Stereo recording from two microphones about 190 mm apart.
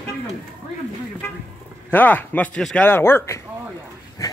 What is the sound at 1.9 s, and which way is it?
A man's voice, 10° left (ahead or behind).